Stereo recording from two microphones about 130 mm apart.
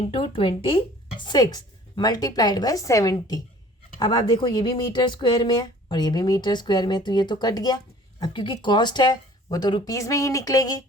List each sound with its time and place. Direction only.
0.0 s speech: 45° left (ahead or behind); by 10.8 s 25° left (ahead or behind)